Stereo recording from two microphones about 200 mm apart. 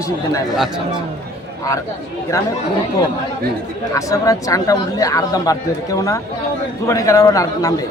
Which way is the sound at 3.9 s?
15° left (ahead or behind).